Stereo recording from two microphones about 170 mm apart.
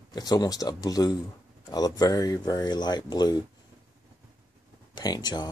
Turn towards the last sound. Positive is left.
turn(degrees=25)  # may be behind; listen again after turning